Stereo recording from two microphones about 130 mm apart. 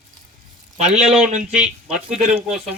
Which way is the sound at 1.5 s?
10° right (ahead or behind).